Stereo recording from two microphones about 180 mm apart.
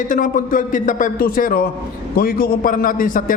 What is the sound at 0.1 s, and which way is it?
A man's voice, 45° left (ahead or behind).